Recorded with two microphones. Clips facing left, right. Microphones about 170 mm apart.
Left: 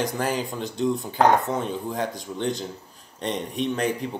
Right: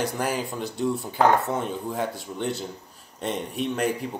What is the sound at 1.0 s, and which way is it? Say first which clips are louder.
Speech: left 1 dB; 20° left (ahead or behind).